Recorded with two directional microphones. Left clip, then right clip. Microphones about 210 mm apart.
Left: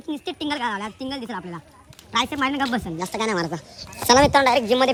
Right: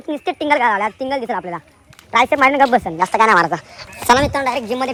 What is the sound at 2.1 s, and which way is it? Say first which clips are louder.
Speech: right 10 dB; 35° right (ahead or behind).